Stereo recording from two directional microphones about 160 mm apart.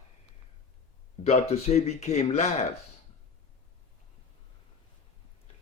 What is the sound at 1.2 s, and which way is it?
A man's voice, 45° left (ahead or behind).